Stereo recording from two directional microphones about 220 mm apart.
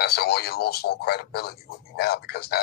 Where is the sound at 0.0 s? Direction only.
45° left (ahead or behind).